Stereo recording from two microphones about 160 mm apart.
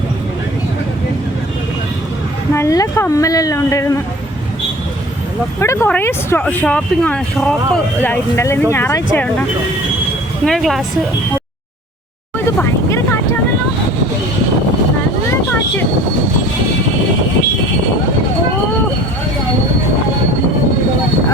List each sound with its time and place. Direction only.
2.5 s a woman's voice: 20° left (ahead or behind)
5.5 s speech: 15° left (ahead or behind)
10.4 s speech: centre (ahead or behind)
12.5 s vehicle: 15° left (ahead or behind)